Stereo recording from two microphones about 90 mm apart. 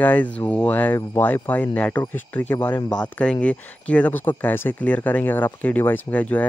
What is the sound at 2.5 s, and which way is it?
Speech, 50° left (ahead or behind).